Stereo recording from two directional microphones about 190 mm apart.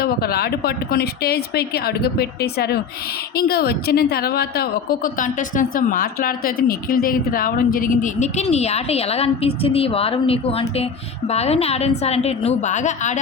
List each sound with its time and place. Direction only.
0.0 s a woman's voice: 55° left (ahead or behind); by 13.1 s 40° left (ahead or behind)